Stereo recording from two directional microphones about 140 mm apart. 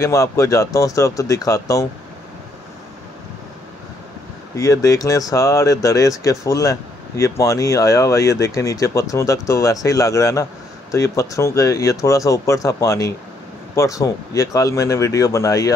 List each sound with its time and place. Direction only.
0.0 s speech: 20° left (ahead or behind)
4.6 s speech: 25° left (ahead or behind)